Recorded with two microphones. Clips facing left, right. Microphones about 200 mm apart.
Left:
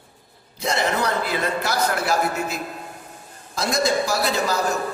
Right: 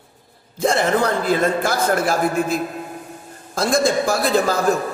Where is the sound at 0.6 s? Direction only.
50° right (ahead or behind).